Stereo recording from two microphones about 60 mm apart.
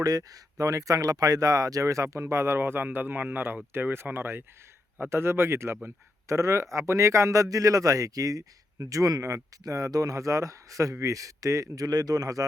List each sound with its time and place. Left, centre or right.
0.0 s speech: right
0.6 s speech: right
6.2 s speech: right
7.5 s speech: right